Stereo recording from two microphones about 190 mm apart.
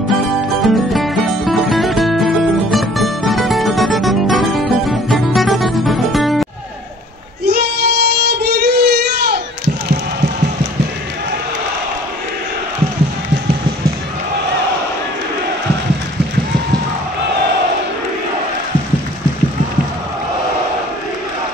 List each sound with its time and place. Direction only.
0.7 s music: centre (ahead or behind)
7.4 s child singing: 55° right (ahead or behind)